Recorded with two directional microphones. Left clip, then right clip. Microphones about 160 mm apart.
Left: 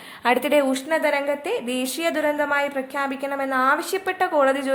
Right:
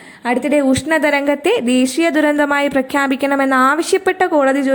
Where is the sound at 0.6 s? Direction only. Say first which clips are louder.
Right 7 dB; 30° right (ahead or behind).